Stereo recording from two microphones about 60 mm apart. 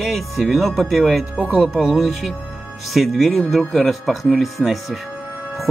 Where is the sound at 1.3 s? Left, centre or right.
Centre.